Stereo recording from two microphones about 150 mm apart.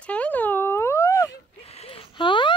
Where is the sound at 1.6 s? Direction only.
40° left (ahead or behind).